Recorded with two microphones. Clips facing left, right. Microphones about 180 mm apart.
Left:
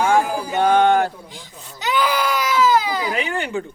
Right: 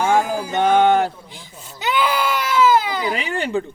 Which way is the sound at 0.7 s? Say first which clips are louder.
Right 1 dB; 15° right (ahead or behind).